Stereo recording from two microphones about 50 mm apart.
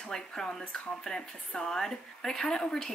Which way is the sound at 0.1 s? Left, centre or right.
Centre.